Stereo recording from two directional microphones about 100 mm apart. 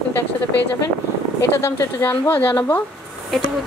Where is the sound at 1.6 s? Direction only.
25° left (ahead or behind).